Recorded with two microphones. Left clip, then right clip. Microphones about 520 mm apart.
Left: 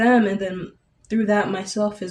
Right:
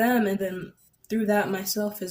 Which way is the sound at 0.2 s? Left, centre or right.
Right.